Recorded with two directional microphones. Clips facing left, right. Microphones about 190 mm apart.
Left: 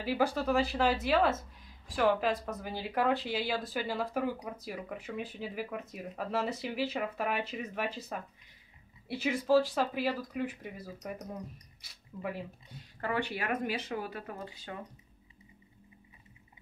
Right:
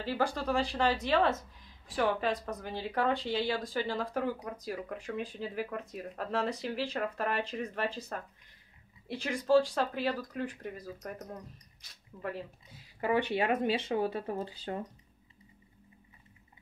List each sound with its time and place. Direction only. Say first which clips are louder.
0.0 s speech: left 2 dB; 10° left (ahead or behind)
13.0 s speech: right 5 dB; 20° right (ahead or behind); by 14.9 s 35° right (ahead or behind)